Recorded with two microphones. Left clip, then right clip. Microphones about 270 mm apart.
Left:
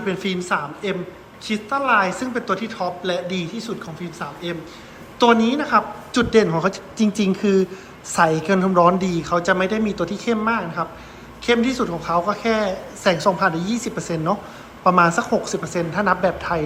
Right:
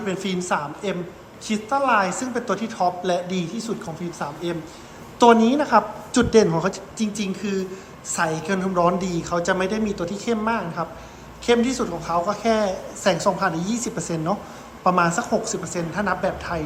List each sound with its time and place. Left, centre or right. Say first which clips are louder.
0.0 s a woman's voice: left 2 dB; centre